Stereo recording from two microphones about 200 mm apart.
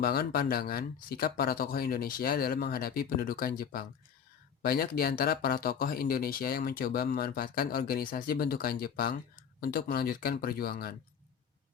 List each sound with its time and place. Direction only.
0.0 s speech: 50° left (ahead or behind)